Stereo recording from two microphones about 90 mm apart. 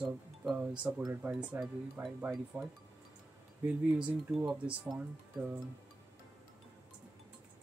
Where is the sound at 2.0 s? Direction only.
25° right (ahead or behind).